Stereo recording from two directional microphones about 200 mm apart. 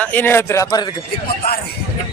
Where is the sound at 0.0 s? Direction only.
10° left (ahead or behind).